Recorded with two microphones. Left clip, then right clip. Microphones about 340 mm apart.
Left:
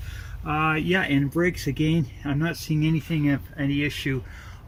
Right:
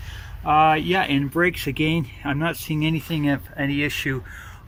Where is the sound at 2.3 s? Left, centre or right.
Centre.